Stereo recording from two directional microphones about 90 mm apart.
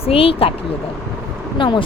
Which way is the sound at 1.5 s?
65° left (ahead or behind).